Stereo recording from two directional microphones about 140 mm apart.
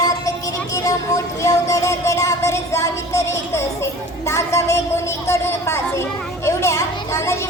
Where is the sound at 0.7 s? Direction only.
20° left (ahead or behind).